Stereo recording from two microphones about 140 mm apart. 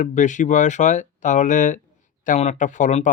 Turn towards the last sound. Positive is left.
turn(degrees=60)  # may be behind; listen again after turning